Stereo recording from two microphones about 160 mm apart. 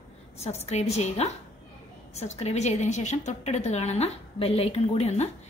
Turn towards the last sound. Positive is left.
turn(degrees=40)  # may be behind; listen again after turning